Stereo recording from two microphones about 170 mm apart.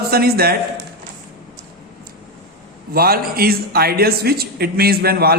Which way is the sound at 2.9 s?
60° right (ahead or behind).